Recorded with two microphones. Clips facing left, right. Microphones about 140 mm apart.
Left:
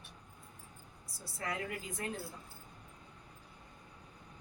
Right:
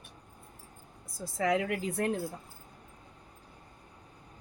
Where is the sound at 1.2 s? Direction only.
90° right; by 2.1 s 70° right (ahead or behind).